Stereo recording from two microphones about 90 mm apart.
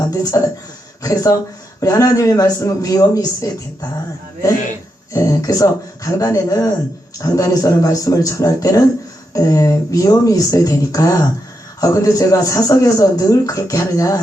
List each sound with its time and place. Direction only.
0.0 s a man's voice: 40° left (ahead or behind)
5.1 s a man's voice: 40° left (ahead or behind)